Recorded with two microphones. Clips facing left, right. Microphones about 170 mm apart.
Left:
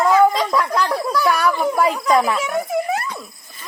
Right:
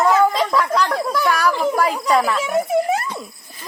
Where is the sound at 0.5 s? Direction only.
Centre (ahead or behind).